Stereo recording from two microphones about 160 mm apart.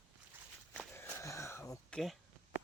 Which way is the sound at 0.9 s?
15° left (ahead or behind).